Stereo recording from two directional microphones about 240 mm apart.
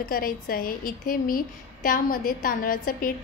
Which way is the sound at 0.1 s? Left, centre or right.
Left.